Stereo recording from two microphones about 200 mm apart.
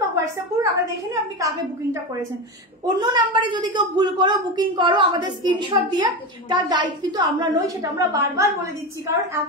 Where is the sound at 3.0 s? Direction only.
20° right (ahead or behind).